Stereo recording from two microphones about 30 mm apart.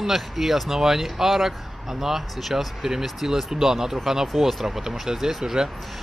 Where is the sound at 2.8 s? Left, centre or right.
Centre.